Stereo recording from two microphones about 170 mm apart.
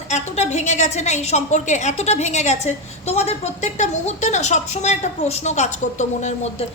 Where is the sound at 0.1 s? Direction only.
45° left (ahead or behind).